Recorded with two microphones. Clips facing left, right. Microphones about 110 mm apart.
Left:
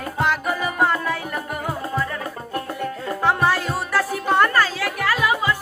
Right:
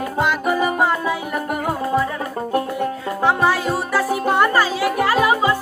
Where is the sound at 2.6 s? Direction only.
5° right (ahead or behind).